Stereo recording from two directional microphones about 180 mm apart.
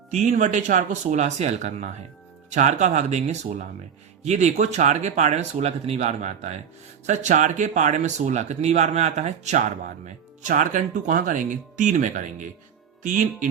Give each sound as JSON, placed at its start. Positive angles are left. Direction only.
{"t": 0.1, "sound": "speech", "side_deg": -40}